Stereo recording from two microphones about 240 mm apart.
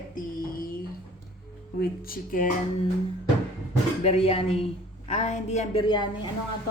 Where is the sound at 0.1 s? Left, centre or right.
Left.